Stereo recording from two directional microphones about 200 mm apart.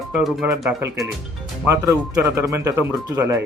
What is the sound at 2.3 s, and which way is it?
Speech, 15° right (ahead or behind).